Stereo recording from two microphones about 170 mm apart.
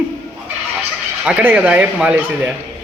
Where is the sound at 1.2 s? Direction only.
10° right (ahead or behind).